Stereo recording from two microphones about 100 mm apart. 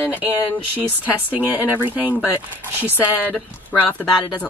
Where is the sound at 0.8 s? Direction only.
15° right (ahead or behind).